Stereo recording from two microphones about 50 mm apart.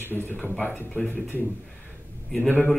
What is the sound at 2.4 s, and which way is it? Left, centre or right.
Speech, left.